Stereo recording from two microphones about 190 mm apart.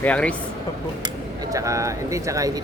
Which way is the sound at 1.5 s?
15° right (ahead or behind).